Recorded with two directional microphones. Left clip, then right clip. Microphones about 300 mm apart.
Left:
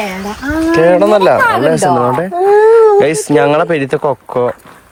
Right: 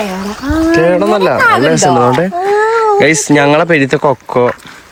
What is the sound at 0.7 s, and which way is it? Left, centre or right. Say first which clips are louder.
Speech: left 2 dB; centre.